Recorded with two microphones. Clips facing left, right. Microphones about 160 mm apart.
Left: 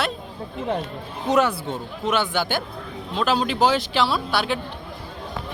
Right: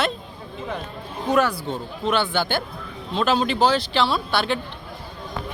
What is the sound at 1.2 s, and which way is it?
Speech, 20° left (ahead or behind).